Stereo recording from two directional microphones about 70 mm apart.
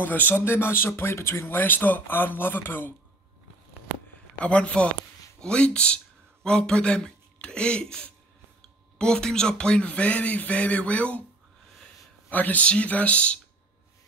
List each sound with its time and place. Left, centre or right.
0.0 s speech: left
4.4 s speech: centre
12.3 s speech: left